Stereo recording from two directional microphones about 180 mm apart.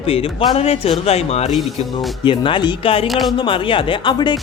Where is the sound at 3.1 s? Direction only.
Centre (ahead or behind).